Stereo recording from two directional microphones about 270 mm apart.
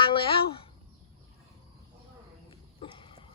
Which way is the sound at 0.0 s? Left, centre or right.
Centre.